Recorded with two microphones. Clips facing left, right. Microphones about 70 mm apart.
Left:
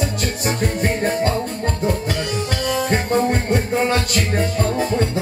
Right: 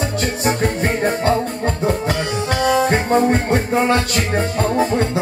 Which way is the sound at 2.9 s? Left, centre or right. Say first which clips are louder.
Right 3 dB; right.